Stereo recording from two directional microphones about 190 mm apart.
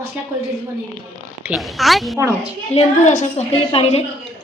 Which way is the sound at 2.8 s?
40° left (ahead or behind).